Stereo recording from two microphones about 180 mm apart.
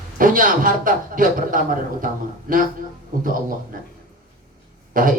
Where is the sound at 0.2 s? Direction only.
50° right (ahead or behind).